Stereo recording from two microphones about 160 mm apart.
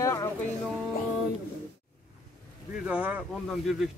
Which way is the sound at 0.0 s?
20° left (ahead or behind).